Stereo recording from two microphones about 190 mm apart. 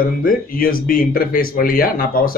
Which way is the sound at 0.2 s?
50° left (ahead or behind).